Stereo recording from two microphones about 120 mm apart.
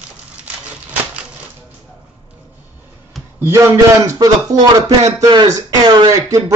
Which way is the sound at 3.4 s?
20° right (ahead or behind).